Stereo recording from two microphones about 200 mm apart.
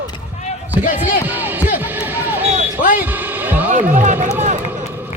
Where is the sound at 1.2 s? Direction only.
10° right (ahead or behind).